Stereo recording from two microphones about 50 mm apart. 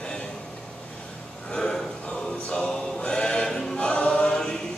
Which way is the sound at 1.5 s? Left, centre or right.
Centre.